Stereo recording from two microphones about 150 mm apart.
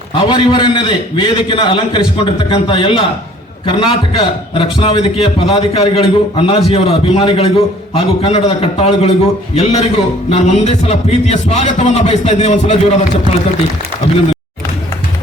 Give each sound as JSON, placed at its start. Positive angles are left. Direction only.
{"t": 0.3, "sound": "a man's voice", "side_deg": 35}